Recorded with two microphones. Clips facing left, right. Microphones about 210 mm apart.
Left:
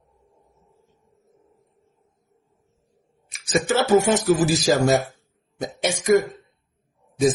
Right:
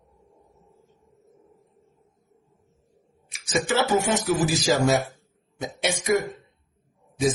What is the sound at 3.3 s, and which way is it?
Speech, 40° left (ahead or behind).